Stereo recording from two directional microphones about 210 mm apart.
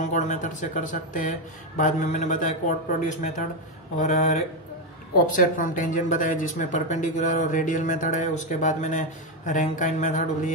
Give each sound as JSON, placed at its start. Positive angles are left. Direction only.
{"t": 0.1, "sound": "speech", "side_deg": 35}